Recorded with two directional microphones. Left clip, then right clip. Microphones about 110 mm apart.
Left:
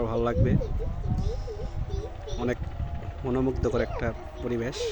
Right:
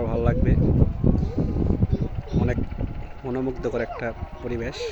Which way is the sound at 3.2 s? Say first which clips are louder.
Even; 25° left (ahead or behind).